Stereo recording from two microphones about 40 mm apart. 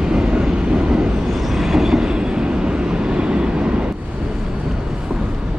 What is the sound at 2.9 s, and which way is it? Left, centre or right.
Vehicle, right.